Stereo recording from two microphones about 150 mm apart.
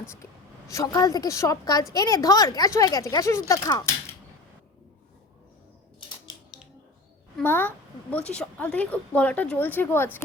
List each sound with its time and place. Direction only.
0.7 s a woman's voice: 20° left (ahead or behind)
7.4 s a woman's voice: 15° left (ahead or behind)